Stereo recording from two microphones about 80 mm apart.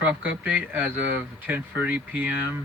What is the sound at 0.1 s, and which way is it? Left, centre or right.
Speech, centre.